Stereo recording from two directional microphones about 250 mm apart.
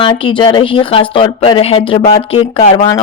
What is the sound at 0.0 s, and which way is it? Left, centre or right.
Speech, centre.